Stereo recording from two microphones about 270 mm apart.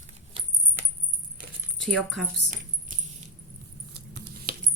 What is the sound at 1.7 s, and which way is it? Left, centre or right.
Speech, centre.